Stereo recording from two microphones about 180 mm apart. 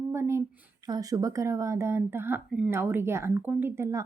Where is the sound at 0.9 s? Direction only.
20° right (ahead or behind).